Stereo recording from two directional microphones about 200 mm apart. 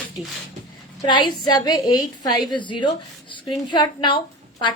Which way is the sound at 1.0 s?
25° left (ahead or behind).